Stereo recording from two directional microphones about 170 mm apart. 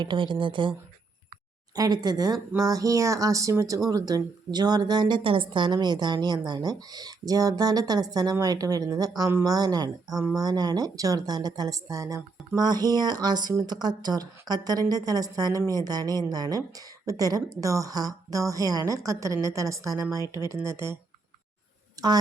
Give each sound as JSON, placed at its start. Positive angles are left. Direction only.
{"t": 0.0, "sound": "a woman's voice", "side_deg": -30}